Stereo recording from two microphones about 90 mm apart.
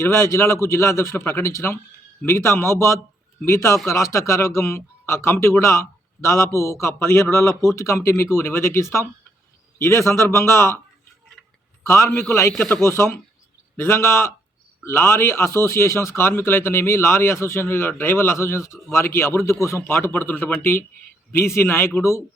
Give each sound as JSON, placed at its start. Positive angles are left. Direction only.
{"t": 0.0, "sound": "a man's voice", "side_deg": 30}
{"t": 11.9, "sound": "a man's voice", "side_deg": 30}